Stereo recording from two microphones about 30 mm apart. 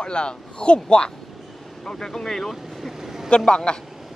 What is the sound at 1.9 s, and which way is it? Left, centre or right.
Speech, left.